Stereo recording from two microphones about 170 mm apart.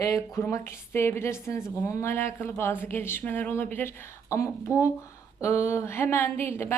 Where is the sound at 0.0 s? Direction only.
15° left (ahead or behind).